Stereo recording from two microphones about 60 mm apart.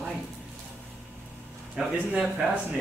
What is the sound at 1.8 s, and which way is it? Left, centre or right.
Speech, centre.